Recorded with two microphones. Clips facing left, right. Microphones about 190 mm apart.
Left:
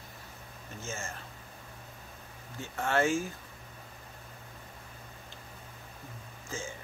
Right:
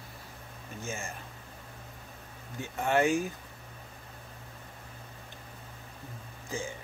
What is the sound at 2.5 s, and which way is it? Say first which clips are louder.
Speech: right 2 dB; 15° right (ahead or behind).